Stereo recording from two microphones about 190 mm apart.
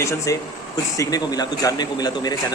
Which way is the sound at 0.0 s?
15° left (ahead or behind).